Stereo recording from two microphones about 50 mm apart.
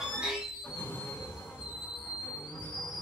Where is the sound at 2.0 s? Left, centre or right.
Left.